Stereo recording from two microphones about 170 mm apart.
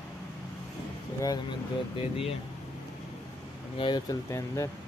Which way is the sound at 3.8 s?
25° left (ahead or behind).